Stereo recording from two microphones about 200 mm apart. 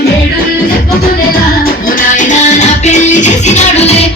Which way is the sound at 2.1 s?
35° left (ahead or behind).